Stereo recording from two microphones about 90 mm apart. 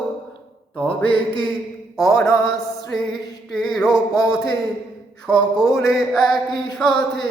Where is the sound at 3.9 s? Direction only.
45° left (ahead or behind).